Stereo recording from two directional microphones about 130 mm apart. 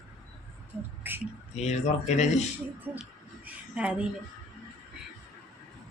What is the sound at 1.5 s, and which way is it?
Speech, 60° left (ahead or behind).